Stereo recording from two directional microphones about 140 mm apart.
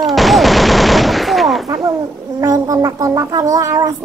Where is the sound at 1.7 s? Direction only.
20° right (ahead or behind).